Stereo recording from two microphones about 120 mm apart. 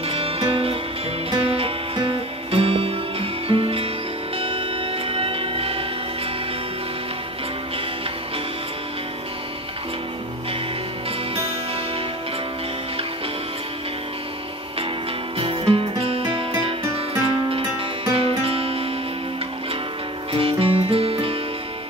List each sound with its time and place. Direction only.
0.1 s music: 50° right (ahead or behind)
15.3 s music: 50° right (ahead or behind)
18.1 s music: 50° right (ahead or behind)
20.3 s music: 50° right (ahead or behind)